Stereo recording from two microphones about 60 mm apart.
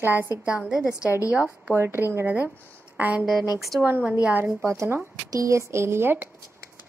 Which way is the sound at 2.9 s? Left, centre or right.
Right.